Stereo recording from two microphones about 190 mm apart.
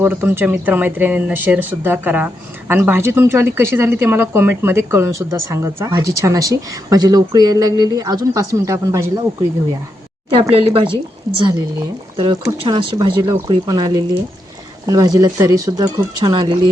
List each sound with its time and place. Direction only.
0.0 s speech: 10° right (ahead or behind)
10.5 s speech: 30° right (ahead or behind)
12.1 s speech: 20° right (ahead or behind)